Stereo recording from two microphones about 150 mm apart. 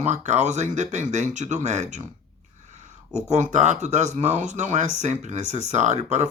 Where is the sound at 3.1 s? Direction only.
50° right (ahead or behind).